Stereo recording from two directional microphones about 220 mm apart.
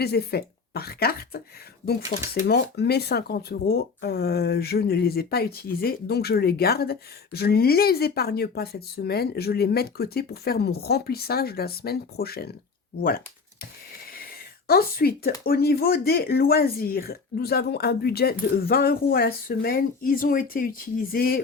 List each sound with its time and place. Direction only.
0.0 s speech: 45° left (ahead or behind)
14.7 s speech: 45° left (ahead or behind)